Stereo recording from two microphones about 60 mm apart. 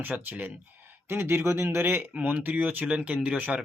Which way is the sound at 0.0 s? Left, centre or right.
Right.